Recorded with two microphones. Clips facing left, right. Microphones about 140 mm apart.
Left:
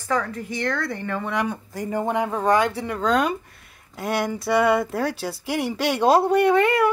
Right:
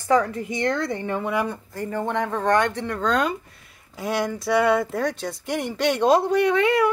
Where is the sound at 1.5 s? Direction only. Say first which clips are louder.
Left 2 dB; 15° left (ahead or behind).